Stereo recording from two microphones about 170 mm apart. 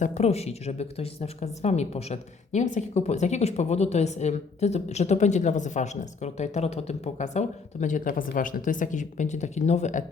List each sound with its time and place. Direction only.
0.0 s speech: 40° left (ahead or behind)